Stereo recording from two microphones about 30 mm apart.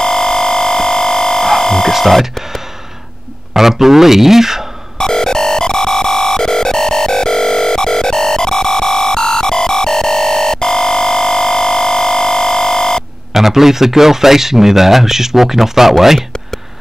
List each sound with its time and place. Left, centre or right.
0.0 s music: centre
1.9 s speech: centre
3.5 s speech: centre
4.9 s music: left
13.3 s speech: centre